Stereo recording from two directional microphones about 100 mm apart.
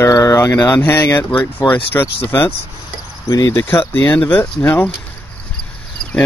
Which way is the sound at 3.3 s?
35° left (ahead or behind).